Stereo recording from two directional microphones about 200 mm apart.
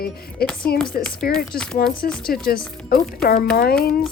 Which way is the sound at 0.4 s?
50° left (ahead or behind).